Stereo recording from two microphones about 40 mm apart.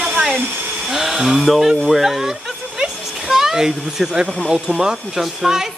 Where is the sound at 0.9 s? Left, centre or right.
Centre.